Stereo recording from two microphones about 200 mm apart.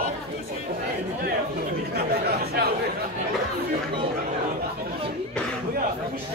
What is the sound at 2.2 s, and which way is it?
Chatter, 50° right (ahead or behind).